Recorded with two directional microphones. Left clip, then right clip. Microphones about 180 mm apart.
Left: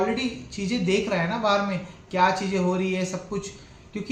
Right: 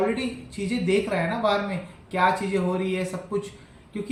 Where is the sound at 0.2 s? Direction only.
15° left (ahead or behind).